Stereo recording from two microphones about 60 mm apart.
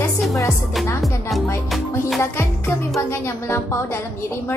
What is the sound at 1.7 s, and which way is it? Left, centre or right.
Music, centre.